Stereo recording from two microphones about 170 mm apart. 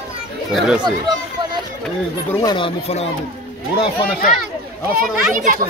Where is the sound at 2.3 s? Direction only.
25° left (ahead or behind).